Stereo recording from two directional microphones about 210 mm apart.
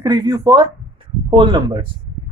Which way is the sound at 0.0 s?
20° right (ahead or behind).